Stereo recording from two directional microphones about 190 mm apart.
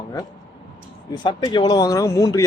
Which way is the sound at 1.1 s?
25° left (ahead or behind).